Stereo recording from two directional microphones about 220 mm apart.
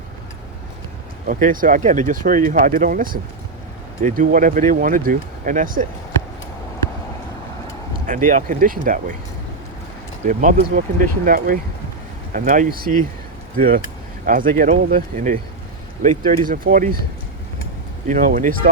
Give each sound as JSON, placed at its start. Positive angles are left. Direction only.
{"t": 1.3, "sound": "speech", "side_deg": -35}
{"t": 8.0, "sound": "speech", "side_deg": -35}
{"t": 10.2, "sound": "speech", "side_deg": -35}
{"t": 18.1, "sound": "speech", "side_deg": -40}